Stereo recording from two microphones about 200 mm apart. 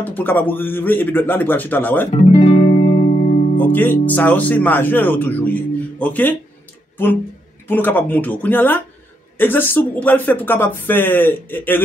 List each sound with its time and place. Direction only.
0.0 s speech: 10° left (ahead or behind)
2.3 s music: 30° left (ahead or behind)
3.5 s speech: 10° left (ahead or behind)
7.6 s speech: 10° left (ahead or behind)